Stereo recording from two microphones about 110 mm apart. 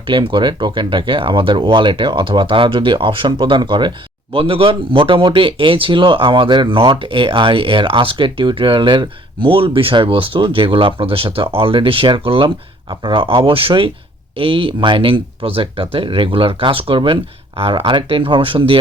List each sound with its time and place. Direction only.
0.0 s speech: 50° right (ahead or behind)